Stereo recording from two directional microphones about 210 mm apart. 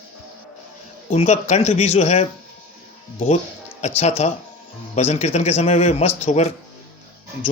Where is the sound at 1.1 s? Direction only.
30° left (ahead or behind).